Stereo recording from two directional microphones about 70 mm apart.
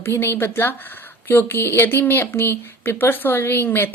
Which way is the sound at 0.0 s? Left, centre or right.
Left.